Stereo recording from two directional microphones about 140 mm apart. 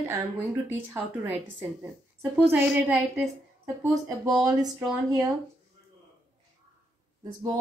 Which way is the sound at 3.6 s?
25° right (ahead or behind).